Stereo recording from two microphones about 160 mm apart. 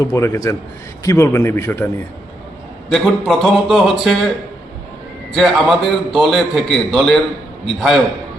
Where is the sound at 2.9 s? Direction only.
Centre (ahead or behind).